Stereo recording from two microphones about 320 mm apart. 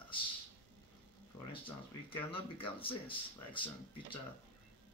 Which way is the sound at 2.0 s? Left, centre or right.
Centre.